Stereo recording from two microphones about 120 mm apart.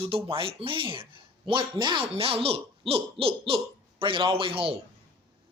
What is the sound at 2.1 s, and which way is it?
Speech, 50° right (ahead or behind).